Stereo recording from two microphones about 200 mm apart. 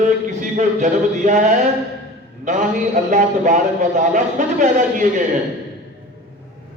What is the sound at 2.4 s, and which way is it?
A man's voice, 40° right (ahead or behind).